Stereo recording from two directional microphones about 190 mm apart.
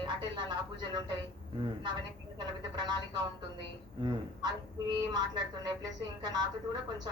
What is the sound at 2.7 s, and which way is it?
Speech, 25° right (ahead or behind).